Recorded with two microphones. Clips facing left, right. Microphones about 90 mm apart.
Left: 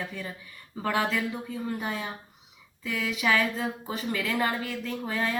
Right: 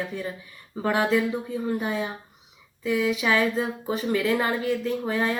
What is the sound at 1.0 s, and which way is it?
Speech, 20° right (ahead or behind).